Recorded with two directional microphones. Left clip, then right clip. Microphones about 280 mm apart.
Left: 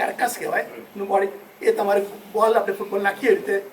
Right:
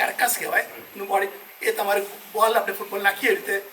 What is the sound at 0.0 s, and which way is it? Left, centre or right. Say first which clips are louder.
A man's voice: even; centre.